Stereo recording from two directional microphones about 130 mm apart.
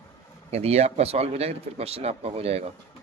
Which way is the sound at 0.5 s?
55° right (ahead or behind).